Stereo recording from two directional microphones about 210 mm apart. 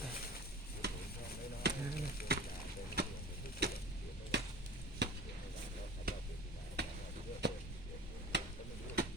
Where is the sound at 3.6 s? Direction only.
50° right (ahead or behind).